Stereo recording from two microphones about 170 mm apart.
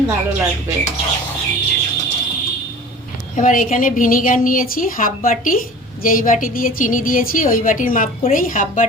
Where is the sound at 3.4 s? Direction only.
50° left (ahead or behind).